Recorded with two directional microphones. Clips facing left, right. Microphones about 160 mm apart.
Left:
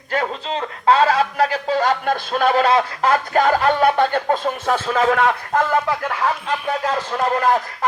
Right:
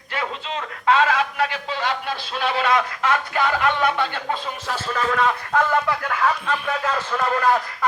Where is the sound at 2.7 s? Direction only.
35° left (ahead or behind); by 5.3 s 80° left.